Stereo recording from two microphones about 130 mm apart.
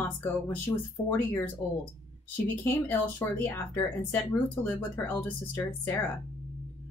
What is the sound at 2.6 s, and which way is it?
Speech, 15° left (ahead or behind).